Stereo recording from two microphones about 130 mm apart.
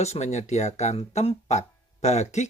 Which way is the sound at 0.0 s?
60° left (ahead or behind).